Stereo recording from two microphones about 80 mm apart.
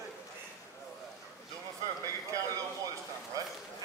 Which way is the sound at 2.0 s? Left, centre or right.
Right.